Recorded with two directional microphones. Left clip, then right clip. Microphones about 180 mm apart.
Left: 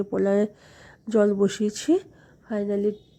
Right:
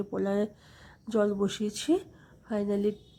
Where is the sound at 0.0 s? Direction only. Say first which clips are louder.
Left 7 dB; 25° left (ahead or behind).